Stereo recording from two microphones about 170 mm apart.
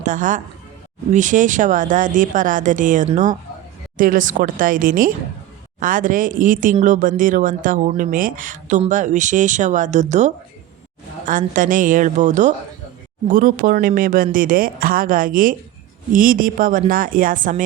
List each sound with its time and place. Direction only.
0.0 s a man's voice: 50° right (ahead or behind)